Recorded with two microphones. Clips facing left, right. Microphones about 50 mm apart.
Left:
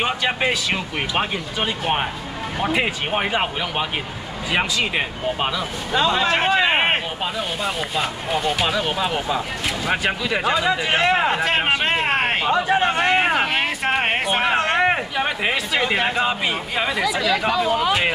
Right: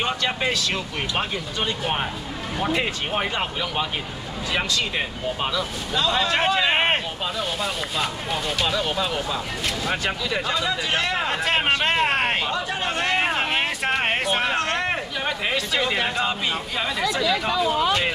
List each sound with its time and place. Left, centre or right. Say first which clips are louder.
0.0 s speech: left 3 dB; centre
11.3 s speech: left 2 dB; centre
12.4 s speech: left 8 dB; left
13.5 s speech: left 2 dB; centre
17.0 s speech: right 1 dB; centre